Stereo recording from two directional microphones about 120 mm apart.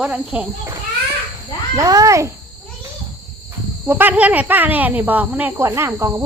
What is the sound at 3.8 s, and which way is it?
Speech, 15° right (ahead or behind).